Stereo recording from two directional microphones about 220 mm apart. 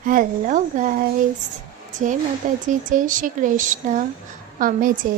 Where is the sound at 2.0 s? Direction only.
35° right (ahead or behind).